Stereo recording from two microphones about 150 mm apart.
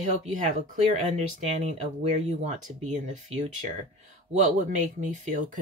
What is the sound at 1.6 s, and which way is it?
Speech, 50° right (ahead or behind).